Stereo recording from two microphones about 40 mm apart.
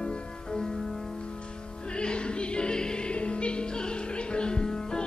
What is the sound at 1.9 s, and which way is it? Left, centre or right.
Music, left.